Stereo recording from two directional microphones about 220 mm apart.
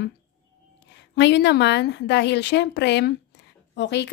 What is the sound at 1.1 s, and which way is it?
Speech, 50° left (ahead or behind).